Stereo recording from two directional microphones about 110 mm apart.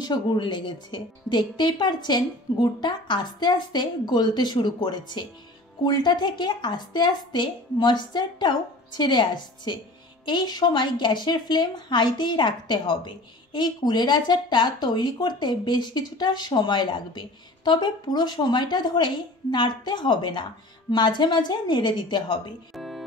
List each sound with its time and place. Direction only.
0.0 s a woman's voice: 45° left (ahead or behind)
22.8 s music: centre (ahead or behind)